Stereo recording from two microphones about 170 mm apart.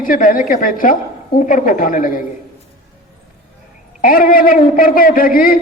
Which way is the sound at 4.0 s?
55° left (ahead or behind).